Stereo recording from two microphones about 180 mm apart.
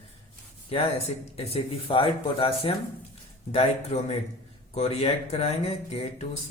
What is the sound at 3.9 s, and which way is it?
Speech, 40° left (ahead or behind).